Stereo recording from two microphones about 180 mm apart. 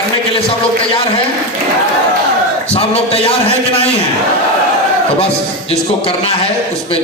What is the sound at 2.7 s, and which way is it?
A man's voice, 35° left (ahead or behind).